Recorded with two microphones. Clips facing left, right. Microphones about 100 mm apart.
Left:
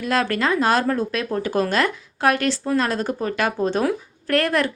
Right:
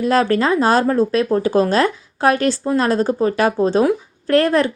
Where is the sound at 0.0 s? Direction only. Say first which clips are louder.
Right 6 dB; 30° right (ahead or behind).